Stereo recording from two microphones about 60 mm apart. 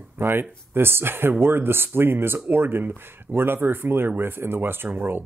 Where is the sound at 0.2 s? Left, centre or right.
Right.